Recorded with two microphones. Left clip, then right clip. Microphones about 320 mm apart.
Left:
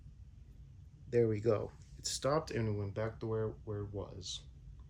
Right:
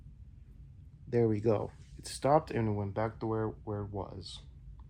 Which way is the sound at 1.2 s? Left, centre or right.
Centre.